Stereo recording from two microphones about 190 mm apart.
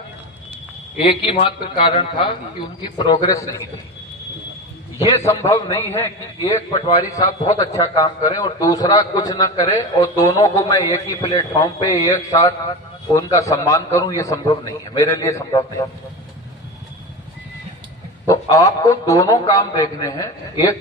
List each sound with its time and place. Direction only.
0.9 s a man's voice: 25° left (ahead or behind)
4.9 s a man's voice: 30° left (ahead or behind)
5.2 s a man's voice: 15° left (ahead or behind)
18.3 s a man's voice: 20° left (ahead or behind)